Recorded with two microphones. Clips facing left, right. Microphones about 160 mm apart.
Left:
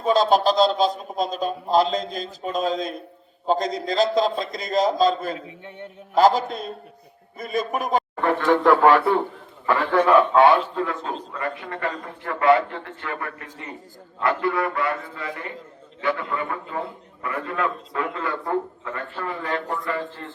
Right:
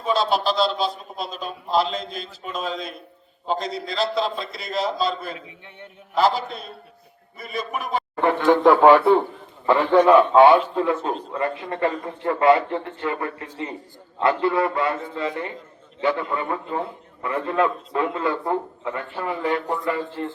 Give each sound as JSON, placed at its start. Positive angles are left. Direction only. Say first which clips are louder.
{"t": 0.0, "sound": "a man's voice", "louder": "left 4 dB", "side_deg": 45}
{"t": 8.2, "sound": "a man's voice", "louder": "right 4 dB", "side_deg": -20}